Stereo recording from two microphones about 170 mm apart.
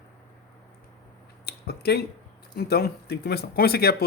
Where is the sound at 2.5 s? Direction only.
65° left (ahead or behind).